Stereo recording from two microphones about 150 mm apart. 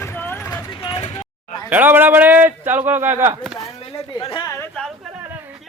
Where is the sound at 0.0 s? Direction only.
15° left (ahead or behind).